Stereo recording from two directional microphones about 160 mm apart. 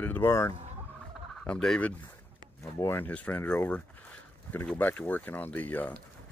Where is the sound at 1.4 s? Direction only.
5° left (ahead or behind).